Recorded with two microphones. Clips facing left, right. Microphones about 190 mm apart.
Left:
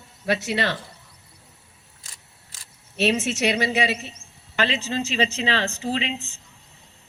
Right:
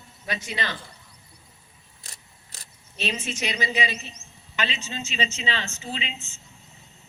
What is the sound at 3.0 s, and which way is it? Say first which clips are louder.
Speech: left 8 dB; 70° left (ahead or behind).